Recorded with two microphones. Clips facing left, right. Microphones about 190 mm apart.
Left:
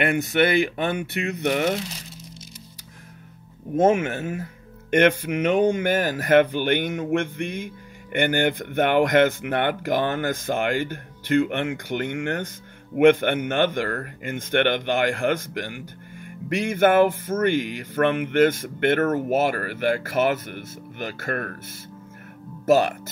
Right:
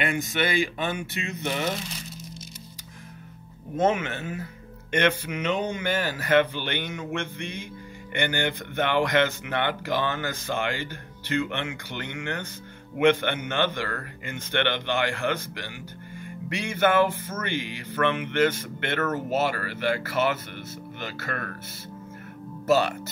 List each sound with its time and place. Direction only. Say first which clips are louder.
0.0 s speech: left 6 dB; 60° left (ahead or behind)
3.7 s speech: left 5 dB; 45° left (ahead or behind)
22.7 s speech: left 4 dB; 45° left (ahead or behind)